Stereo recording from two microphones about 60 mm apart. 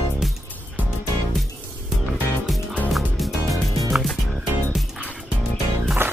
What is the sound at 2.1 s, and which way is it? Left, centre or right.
Music, centre.